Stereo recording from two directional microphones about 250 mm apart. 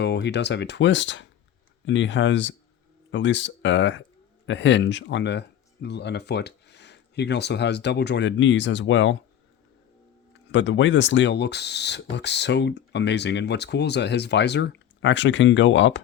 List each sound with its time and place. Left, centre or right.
0.0 s speech: left
10.5 s speech: left